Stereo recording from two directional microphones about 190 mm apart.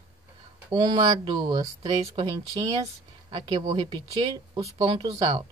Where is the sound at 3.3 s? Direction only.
20° right (ahead or behind).